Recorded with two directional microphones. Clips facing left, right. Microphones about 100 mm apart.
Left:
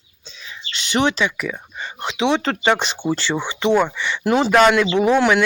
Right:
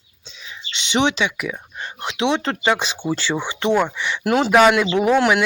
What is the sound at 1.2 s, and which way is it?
Speech, 10° right (ahead or behind).